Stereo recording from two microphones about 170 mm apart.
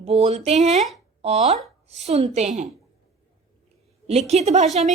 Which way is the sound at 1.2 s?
35° right (ahead or behind).